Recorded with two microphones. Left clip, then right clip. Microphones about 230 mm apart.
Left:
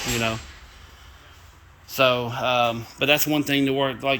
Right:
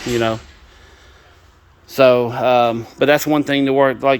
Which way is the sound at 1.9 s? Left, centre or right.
Right.